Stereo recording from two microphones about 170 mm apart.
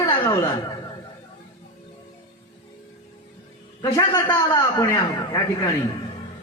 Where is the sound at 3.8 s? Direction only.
20° left (ahead or behind).